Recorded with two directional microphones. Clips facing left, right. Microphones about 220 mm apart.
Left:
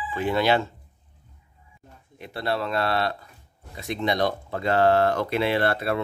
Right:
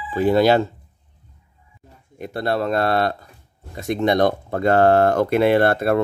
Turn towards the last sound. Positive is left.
turn(degrees=-50)  # may be behind; listen again after turning